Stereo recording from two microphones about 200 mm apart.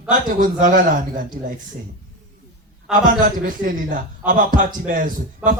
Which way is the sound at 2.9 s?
40° right (ahead or behind).